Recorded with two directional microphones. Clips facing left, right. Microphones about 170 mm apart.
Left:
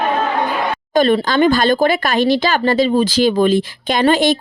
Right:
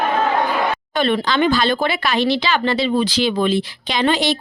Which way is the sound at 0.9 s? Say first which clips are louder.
Left 6 dB; 40° left (ahead or behind).